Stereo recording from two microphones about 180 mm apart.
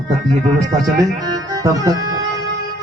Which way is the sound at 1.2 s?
20° right (ahead or behind).